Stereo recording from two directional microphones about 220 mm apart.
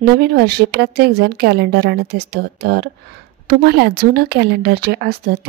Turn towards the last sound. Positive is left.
turn(degrees=-45)  # may be behind; listen again after turning